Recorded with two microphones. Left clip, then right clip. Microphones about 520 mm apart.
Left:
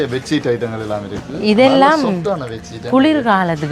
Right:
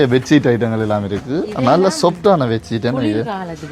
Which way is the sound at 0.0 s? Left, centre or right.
Right.